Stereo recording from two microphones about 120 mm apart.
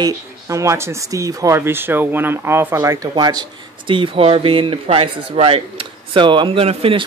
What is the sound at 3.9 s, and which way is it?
Speech, 50° right (ahead or behind).